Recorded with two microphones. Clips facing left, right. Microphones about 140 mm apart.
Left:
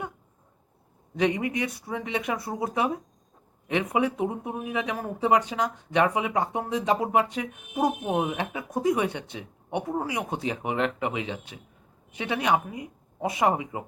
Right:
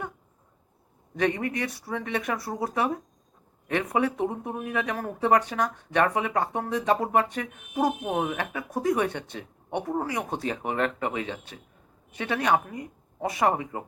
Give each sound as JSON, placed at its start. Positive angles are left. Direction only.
{"t": 1.2, "sound": "speech", "side_deg": 15}